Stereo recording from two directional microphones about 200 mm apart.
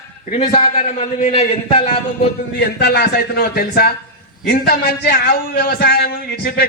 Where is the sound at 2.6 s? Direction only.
50° left (ahead or behind).